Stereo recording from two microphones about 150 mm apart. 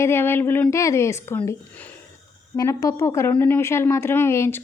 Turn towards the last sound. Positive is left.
turn(degrees=20)  # may be behind; listen again after turning